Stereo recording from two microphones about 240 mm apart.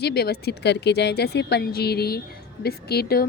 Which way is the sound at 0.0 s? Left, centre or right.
Left.